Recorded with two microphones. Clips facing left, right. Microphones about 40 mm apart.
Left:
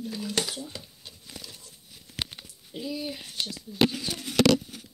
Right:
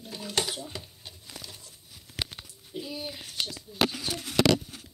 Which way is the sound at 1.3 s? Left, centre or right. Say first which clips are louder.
Left 1 dB; centre.